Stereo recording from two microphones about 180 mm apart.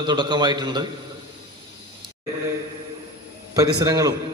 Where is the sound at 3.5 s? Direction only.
20° right (ahead or behind).